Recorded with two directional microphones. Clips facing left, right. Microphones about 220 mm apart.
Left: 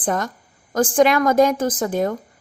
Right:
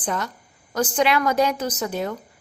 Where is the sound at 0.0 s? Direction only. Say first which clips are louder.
Left 4 dB; 45° left (ahead or behind).